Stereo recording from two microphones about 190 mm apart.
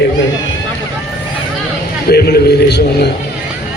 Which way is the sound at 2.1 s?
55° left (ahead or behind).